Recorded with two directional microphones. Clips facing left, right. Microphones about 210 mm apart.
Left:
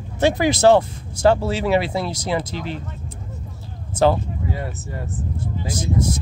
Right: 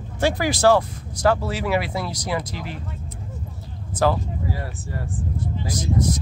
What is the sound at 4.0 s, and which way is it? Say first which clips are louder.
Speech: left 3 dB; 25° left (ahead or behind).